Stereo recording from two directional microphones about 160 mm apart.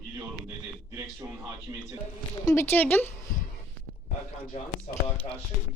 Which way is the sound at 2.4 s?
15° left (ahead or behind).